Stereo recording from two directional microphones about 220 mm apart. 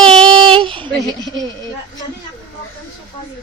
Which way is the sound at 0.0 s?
5° left (ahead or behind).